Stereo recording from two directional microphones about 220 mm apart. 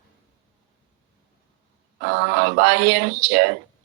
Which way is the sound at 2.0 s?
50° right (ahead or behind).